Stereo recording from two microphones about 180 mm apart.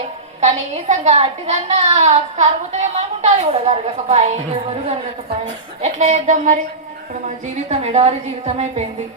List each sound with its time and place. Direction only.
0.3 s a woman's voice: 40° right (ahead or behind)
5.8 s a woman's voice: 40° right (ahead or behind)